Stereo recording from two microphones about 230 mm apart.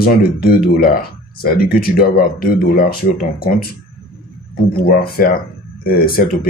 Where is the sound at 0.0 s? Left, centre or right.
Left.